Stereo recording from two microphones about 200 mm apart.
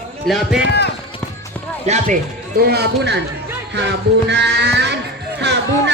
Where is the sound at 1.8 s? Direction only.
35° right (ahead or behind).